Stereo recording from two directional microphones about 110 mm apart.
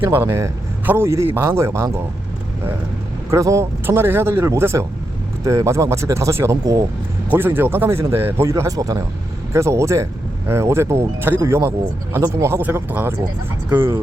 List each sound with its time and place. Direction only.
0.1 s speech: 20° right (ahead or behind)
3.2 s speech: 25° right (ahead or behind)
7.3 s speech: 20° right (ahead or behind)